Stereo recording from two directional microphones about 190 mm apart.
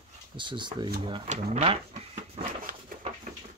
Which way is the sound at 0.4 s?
25° right (ahead or behind).